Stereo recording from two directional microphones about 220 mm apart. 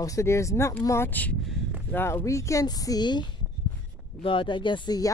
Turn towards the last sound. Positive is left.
turn(degrees=15)  # may be behind; listen again after turning